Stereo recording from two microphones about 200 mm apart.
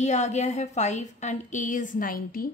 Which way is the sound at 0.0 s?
35° left (ahead or behind).